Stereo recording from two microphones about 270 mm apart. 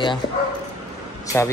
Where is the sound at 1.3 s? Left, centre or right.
Centre.